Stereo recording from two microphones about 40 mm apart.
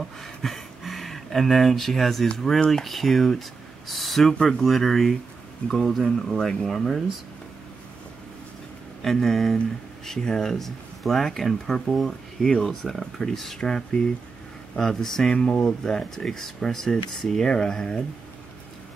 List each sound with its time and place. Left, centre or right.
0.2 s a sound: centre
2.3 s speech: centre
9.0 s speech: centre